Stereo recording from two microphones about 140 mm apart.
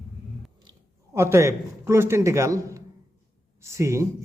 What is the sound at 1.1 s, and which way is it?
A man's voice, 20° right (ahead or behind).